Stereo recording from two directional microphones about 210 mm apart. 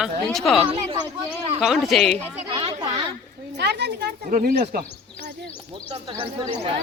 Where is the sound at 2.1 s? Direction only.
25° right (ahead or behind).